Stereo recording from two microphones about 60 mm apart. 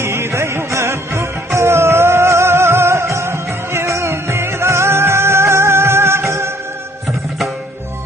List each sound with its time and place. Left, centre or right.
0.0 s music: right